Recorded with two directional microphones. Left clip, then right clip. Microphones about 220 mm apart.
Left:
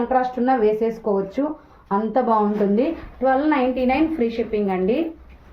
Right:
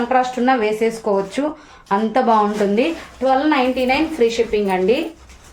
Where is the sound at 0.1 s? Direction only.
20° right (ahead or behind).